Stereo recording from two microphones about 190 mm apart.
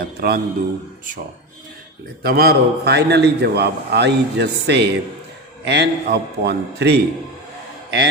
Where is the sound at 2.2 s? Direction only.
55° right (ahead or behind).